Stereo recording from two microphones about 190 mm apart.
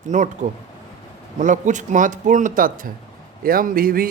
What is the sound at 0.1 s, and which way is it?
Speech, 40° right (ahead or behind).